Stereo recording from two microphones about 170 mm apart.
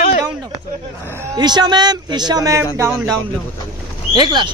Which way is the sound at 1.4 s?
25° right (ahead or behind).